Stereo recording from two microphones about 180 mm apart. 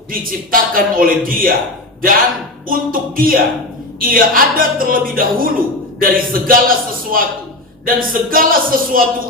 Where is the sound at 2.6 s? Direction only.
50° right (ahead or behind).